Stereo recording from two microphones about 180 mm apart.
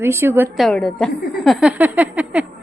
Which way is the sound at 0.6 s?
Centre (ahead or behind).